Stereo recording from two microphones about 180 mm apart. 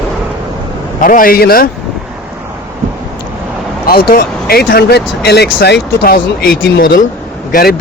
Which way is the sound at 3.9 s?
55° left (ahead or behind).